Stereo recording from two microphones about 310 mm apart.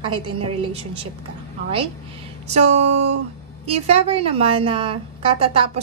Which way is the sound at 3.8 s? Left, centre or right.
Centre.